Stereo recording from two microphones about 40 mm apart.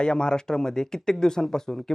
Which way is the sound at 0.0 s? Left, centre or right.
Centre.